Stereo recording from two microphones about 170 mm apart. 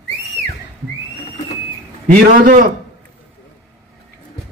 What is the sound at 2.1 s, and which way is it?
Speech, 50° right (ahead or behind).